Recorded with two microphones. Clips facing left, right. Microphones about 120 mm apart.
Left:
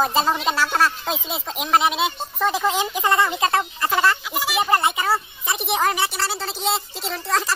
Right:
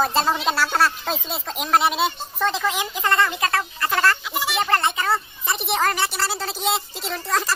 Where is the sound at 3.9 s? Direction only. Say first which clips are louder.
Left 1 dB; 5° left (ahead or behind).